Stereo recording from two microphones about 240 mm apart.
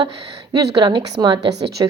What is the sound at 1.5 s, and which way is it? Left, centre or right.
Speech, right.